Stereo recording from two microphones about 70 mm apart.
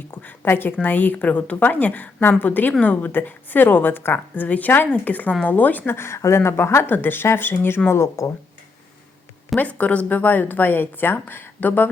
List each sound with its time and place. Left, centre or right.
0.1 s a woman's voice: left
9.6 s a woman's voice: centre